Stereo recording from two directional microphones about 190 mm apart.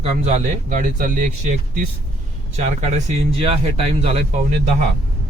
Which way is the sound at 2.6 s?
40° right (ahead or behind).